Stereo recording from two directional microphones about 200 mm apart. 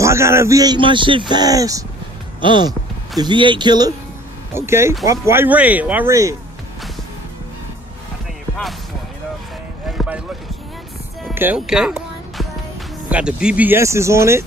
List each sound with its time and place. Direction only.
0.0 s a man's voice: 15° right (ahead or behind)
9.8 s vehicle: 5° right (ahead or behind)
11.3 s music: 5° right (ahead or behind)
13.1 s speech: 5° right (ahead or behind)